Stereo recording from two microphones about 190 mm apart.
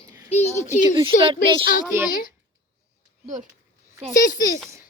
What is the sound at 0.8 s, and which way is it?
Speech, 25° right (ahead or behind).